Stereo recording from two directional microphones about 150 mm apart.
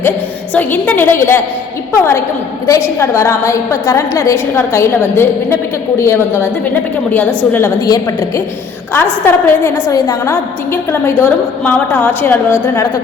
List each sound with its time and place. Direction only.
0.5 s a woman's voice: 10° left (ahead or behind)
7.5 s a woman's voice: 20° left (ahead or behind)
9.2 s a woman's voice: 15° left (ahead or behind)